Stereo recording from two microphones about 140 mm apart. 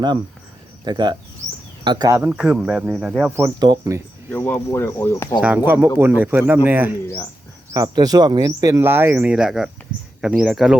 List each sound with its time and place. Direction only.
0.9 s speech: 30° right (ahead or behind)
2.1 s speech: 10° right (ahead or behind)
3.6 s speech: 25° right (ahead or behind)
4.3 s speech: 15° left (ahead or behind)
5.4 s speech: 10° right (ahead or behind)
7.7 s speech: 25° right (ahead or behind); by 10.8 s 5° right (ahead or behind)